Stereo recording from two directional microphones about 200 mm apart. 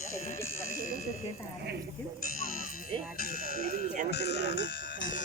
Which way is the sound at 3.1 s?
45° left (ahead or behind).